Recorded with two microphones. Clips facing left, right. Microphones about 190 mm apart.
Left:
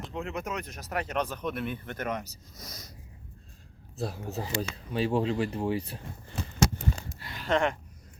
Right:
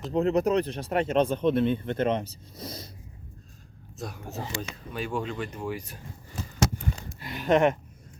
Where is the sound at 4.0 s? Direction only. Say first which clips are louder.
Left 2 dB; 30° left (ahead or behind).